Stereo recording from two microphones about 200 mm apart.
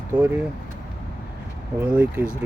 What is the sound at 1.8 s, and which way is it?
Speech, 10° right (ahead or behind).